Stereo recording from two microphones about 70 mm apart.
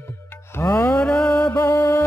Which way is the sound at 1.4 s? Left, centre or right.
Left.